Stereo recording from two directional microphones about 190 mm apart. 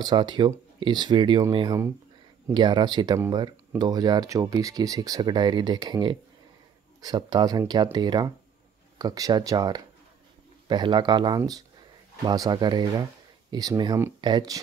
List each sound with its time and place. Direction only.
0.0 s speech: 25° right (ahead or behind)